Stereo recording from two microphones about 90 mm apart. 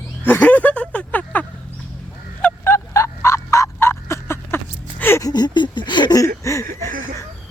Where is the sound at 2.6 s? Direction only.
30° left (ahead or behind).